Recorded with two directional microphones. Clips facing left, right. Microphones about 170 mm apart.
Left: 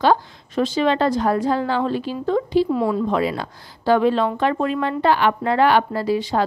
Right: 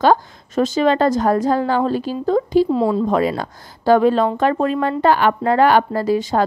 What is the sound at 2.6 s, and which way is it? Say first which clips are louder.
Speech: right 3 dB; 25° right (ahead or behind).